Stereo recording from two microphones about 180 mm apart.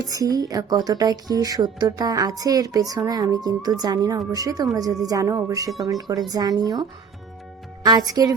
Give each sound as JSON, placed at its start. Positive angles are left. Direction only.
{"t": 0.0, "sound": "speech", "side_deg": -20}
{"t": 7.9, "sound": "speech", "side_deg": -20}